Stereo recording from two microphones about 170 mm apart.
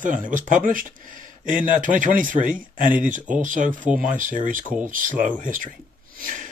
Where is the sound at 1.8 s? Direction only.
50° right (ahead or behind).